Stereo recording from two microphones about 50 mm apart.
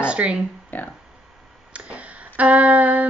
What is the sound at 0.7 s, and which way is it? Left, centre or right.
Speech, left.